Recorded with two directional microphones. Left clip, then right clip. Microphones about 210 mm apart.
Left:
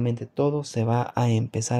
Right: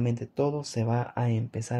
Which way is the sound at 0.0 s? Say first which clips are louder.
Left 3 dB; 15° left (ahead or behind).